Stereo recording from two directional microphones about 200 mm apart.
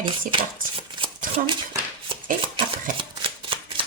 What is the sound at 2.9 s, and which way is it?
Shuffling cards, 25° right (ahead or behind).